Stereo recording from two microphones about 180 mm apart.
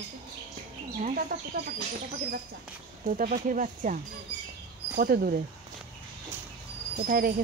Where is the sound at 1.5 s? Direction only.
55° right (ahead or behind).